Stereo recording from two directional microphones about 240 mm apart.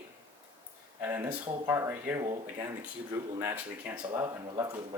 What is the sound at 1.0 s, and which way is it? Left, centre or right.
Speech, centre.